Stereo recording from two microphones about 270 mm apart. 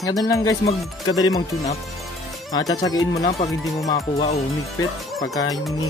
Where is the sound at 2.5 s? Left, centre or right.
Centre.